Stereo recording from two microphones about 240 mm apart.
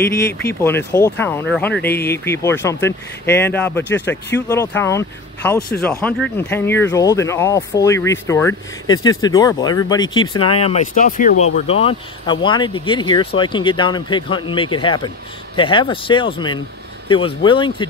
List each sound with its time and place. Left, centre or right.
0.0 s speech: centre